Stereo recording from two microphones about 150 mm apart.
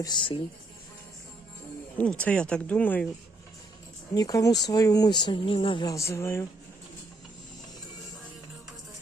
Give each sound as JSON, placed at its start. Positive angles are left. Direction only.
{"t": 0.0, "sound": "speech", "side_deg": 30}
{"t": 2.0, "sound": "speech", "side_deg": 10}
{"t": 4.1, "sound": "speech", "side_deg": 25}
{"t": 5.9, "sound": "speech", "side_deg": 20}